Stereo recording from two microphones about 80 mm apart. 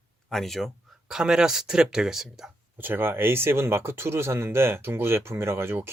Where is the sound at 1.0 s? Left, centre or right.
Centre.